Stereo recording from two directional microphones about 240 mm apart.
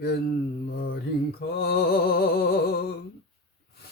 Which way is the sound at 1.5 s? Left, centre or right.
Left.